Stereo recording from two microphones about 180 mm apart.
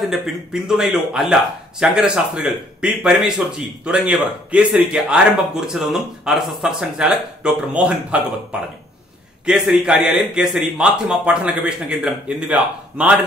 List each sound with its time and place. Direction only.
0.0 s a man's voice: centre (ahead or behind)